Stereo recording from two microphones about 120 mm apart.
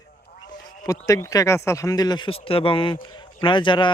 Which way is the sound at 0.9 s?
30° left (ahead or behind).